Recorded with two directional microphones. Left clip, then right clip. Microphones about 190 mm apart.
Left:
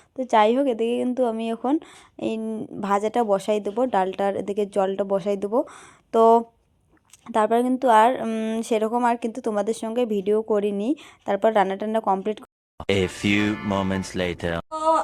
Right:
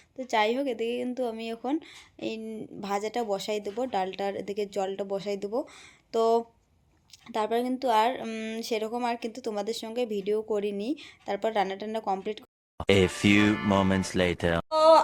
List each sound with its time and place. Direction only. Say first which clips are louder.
0.2 s a woman's voice: left 8 dB; 40° left (ahead or behind)
12.7 s speech: even; centre (ahead or behind)
14.7 s speech: right 3 dB; 15° right (ahead or behind)